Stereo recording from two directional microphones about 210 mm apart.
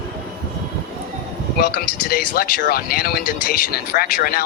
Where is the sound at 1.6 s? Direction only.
45° left (ahead or behind).